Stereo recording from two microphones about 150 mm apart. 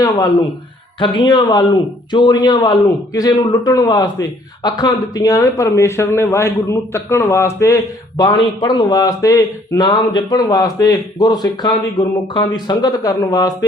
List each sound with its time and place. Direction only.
0.0 s speech: 25° left (ahead or behind)
8.2 s speech: 30° left (ahead or behind)